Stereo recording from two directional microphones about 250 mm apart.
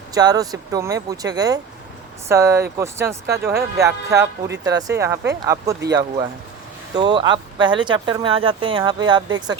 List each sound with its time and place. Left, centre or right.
0.1 s speech: centre